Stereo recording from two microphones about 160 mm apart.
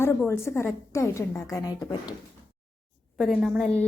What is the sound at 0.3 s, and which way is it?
Speech, 15° left (ahead or behind).